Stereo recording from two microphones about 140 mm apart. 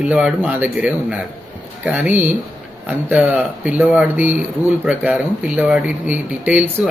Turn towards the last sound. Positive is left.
turn(degrees=-10)  # may be behind; listen again after turning